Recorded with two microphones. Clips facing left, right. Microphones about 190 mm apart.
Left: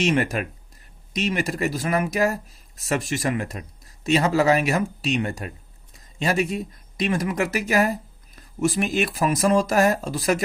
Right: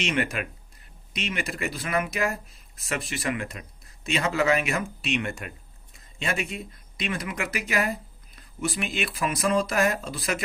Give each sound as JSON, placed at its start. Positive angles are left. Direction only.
{"t": 0.0, "sound": "speech", "side_deg": 40}